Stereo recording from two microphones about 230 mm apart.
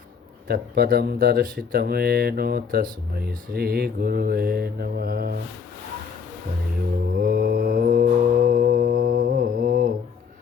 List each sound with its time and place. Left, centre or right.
0.4 s speech: right
7.2 s mantra: right